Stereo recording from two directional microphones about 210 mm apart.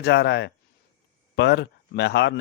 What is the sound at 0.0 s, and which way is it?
A man's voice, 55° left (ahead or behind).